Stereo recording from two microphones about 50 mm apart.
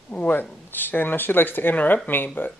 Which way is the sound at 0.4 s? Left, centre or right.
Left.